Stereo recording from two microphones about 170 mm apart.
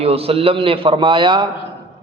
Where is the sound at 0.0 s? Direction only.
35° right (ahead or behind).